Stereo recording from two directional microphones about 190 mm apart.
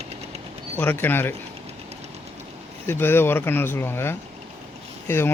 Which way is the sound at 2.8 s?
10° left (ahead or behind).